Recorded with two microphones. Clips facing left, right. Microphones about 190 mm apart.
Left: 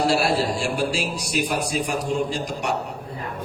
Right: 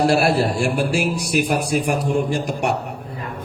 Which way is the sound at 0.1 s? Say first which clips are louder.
Right 4 dB; 60° right (ahead or behind).